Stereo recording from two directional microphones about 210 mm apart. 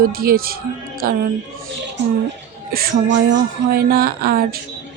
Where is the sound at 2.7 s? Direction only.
50° right (ahead or behind).